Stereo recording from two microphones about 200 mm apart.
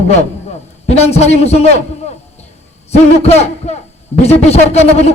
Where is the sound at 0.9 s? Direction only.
30° left (ahead or behind).